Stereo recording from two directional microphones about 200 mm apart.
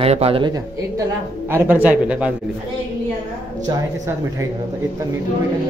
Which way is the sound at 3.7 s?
15° right (ahead or behind).